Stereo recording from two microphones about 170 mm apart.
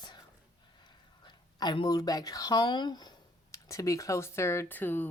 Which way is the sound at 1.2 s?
25° left (ahead or behind).